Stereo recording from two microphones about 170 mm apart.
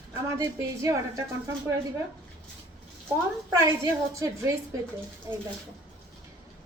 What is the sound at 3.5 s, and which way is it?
A woman's voice, 20° right (ahead or behind).